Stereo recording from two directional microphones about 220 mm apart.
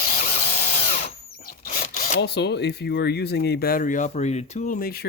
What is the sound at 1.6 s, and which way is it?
Speech, 40° left (ahead or behind).